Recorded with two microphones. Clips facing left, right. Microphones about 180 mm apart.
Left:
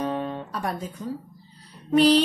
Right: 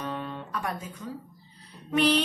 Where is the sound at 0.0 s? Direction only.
35° left (ahead or behind).